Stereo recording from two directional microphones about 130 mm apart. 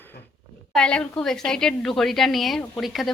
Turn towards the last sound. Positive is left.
turn(degrees=0)  # may be behind; listen again after turning